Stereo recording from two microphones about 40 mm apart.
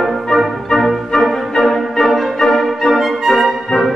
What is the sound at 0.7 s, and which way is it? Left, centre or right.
Music, centre.